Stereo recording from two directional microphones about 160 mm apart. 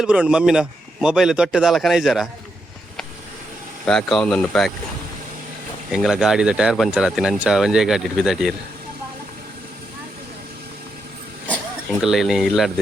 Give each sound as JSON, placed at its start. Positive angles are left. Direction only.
{"t": 0.0, "sound": "speech", "side_deg": -5}
{"t": 3.8, "sound": "speech", "side_deg": 5}
{"t": 5.9, "sound": "speech", "side_deg": 0}
{"t": 11.9, "sound": "speech", "side_deg": 0}